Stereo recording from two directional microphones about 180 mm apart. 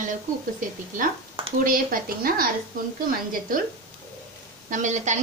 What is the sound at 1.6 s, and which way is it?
Speech, 50° right (ahead or behind).